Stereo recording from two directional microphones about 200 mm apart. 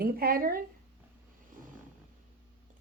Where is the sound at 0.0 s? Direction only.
45° right (ahead or behind).